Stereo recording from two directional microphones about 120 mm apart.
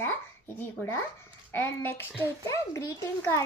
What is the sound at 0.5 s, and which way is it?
A child's voice, 20° left (ahead or behind).